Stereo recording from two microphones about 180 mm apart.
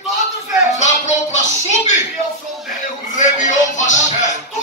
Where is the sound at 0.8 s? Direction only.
40° left (ahead or behind).